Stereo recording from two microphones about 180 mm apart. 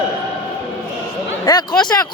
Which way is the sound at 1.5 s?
20° left (ahead or behind).